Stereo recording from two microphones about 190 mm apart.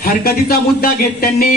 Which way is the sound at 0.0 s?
55° left (ahead or behind).